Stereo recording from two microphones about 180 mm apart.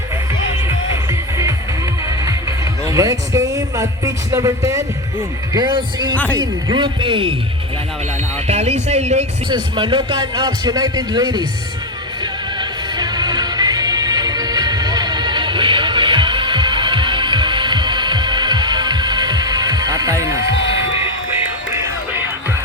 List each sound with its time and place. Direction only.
2.9 s a man's voice: 20° right (ahead or behind)
6.1 s speech: 10° left (ahead or behind)
6.4 s a man's voice: 25° right (ahead or behind)
8.4 s speech: 40° right (ahead or behind)
9.5 s a man's voice: 25° right (ahead or behind)
12.2 s music: 25° right (ahead or behind)